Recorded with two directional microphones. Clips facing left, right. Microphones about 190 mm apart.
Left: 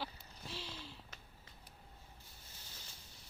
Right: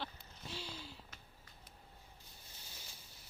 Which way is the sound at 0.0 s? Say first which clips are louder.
Left 1 dB; centre (ahead or behind).